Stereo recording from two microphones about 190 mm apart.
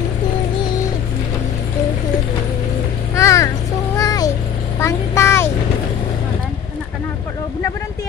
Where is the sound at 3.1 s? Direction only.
15° left (ahead or behind).